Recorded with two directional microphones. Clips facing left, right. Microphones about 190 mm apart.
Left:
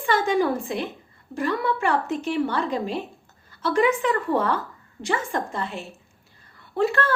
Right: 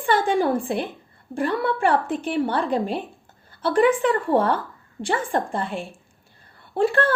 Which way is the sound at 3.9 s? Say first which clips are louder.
Right 3 dB; 30° right (ahead or behind).